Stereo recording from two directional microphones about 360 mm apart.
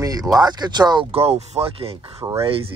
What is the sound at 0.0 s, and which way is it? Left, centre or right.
Speech, centre.